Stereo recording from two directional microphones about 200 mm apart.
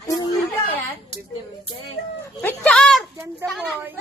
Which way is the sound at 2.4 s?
5° left (ahead or behind).